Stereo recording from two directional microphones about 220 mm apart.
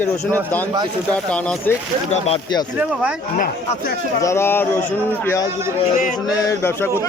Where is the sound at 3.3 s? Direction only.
40° left (ahead or behind).